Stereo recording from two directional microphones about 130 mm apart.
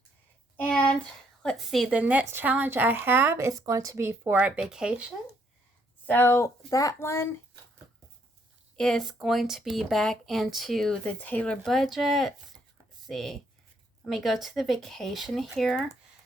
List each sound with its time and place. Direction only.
0.5 s a sound: 10° left (ahead or behind)
1.4 s a woman's voice: centre (ahead or behind)
6.1 s a woman's voice: 15° left (ahead or behind)
8.7 s speech: 5° left (ahead or behind)